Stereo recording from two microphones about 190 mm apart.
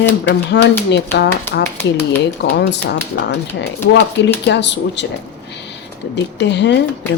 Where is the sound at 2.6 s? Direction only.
60° left (ahead or behind).